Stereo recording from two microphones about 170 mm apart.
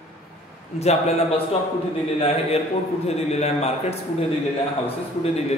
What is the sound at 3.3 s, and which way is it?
Speech, 40° left (ahead or behind).